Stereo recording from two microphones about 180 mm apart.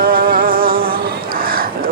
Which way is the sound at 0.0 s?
55° right (ahead or behind).